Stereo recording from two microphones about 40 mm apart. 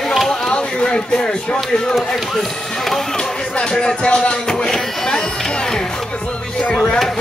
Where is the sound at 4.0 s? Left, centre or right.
Left.